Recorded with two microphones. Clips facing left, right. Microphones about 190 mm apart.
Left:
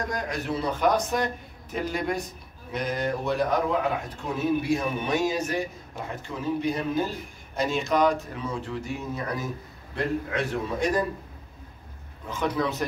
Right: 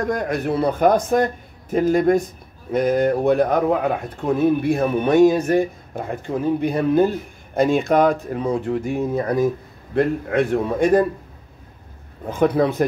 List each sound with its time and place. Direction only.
0.0 s a man's voice: 55° right (ahead or behind)
12.3 s a man's voice: 55° right (ahead or behind)